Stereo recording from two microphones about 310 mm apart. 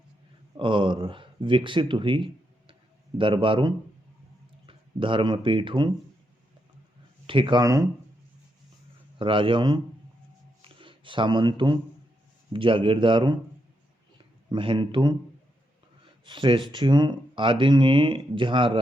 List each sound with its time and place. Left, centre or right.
0.5 s speech: centre
7.3 s speech: centre
9.1 s speech: centre
10.6 s a sound: centre
12.5 s speech: centre
14.5 s speech: centre
16.2 s speech: centre